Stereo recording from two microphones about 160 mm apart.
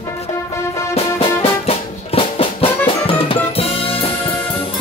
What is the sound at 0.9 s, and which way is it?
Music, 35° left (ahead or behind).